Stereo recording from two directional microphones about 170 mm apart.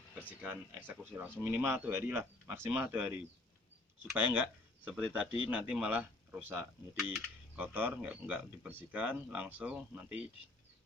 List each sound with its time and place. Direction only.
0.4 s speech: 10° right (ahead or behind)